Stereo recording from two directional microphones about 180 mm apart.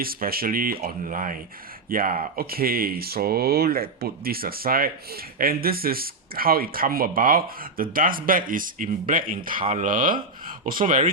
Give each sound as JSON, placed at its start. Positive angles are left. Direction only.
{"t": 0.0, "sound": "speech", "side_deg": -55}